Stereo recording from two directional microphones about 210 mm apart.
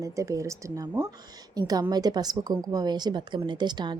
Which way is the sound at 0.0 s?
15° right (ahead or behind).